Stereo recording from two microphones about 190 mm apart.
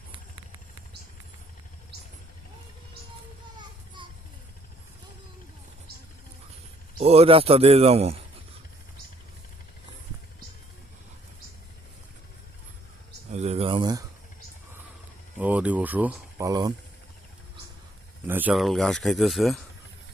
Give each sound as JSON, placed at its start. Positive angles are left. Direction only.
{"t": 3.6, "sound": "children playing", "side_deg": -25}
{"t": 7.0, "sound": "a man's voice", "side_deg": -30}
{"t": 13.3, "sound": "a sound", "side_deg": -35}
{"t": 15.4, "sound": "a sound", "side_deg": -5}
{"t": 16.5, "sound": "speech", "side_deg": -20}
{"t": 18.3, "sound": "speech", "side_deg": -10}